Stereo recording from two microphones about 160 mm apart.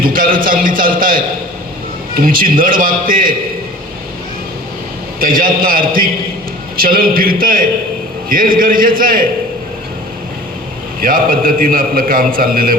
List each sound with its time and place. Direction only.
0.0 s a man's voice: 60° right (ahead or behind)
5.2 s a man's voice: 65° right (ahead or behind)
11.0 s a man's voice: 60° right (ahead or behind)